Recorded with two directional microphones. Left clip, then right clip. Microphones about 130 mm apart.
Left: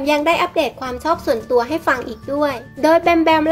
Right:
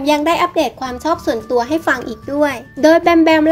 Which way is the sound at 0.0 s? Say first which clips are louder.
Right 2 dB; 25° right (ahead or behind).